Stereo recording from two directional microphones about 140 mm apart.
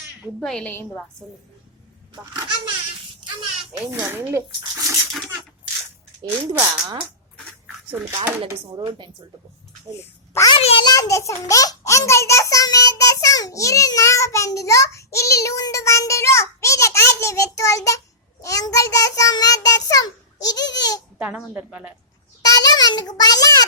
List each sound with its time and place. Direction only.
0.3 s a woman's voice: 5° left (ahead or behind)
2.1 s speech: 30° right (ahead or behind)
3.9 s speech: 15° right (ahead or behind)
6.6 s speech: 30° right (ahead or behind)
10.0 s a child's voice: 20° left (ahead or behind)
10.5 s a child's voice: 40° left (ahead or behind)
10.8 s a child's voice: 20° left (ahead or behind)
18.4 s child singing: 25° left (ahead or behind)
21.2 s speech: 10° right (ahead or behind)
22.4 s a child's voice: 25° left (ahead or behind)